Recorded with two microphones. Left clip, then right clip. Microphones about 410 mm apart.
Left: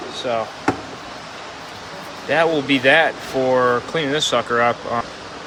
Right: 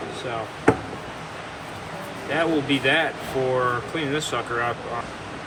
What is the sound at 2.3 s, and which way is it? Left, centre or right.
Speech, left.